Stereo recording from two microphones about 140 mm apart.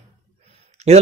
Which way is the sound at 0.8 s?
50° right (ahead or behind).